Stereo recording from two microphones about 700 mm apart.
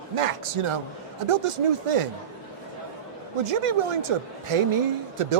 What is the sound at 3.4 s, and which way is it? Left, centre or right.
Speech, right.